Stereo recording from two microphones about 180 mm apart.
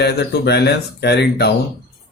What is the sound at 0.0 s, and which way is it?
Speech, 70° left (ahead or behind).